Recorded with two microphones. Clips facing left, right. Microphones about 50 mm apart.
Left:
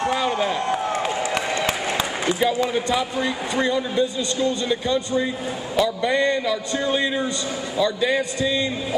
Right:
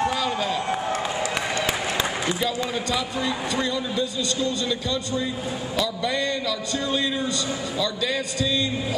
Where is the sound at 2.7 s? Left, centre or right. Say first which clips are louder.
Left 4 dB; left.